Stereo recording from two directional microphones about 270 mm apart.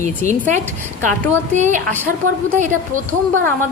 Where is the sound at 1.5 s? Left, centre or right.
Right.